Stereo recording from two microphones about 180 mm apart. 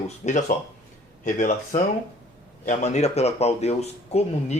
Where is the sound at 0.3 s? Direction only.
40° left (ahead or behind).